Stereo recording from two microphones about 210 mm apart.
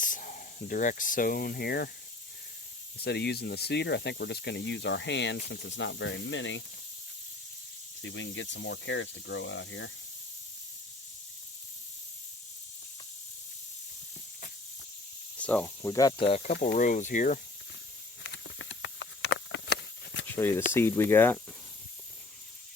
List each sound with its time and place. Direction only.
0.0 s speech: 40° left (ahead or behind)
3.0 s speech: 55° left (ahead or behind)
8.0 s speech: 60° left (ahead or behind)
15.4 s speech: 5° left (ahead or behind)
16.2 s speech: 25° left (ahead or behind)
16.5 s speech: 50° left (ahead or behind)
18.2 s patter: 65° left (ahead or behind)
20.2 s speech: 10° left (ahead or behind)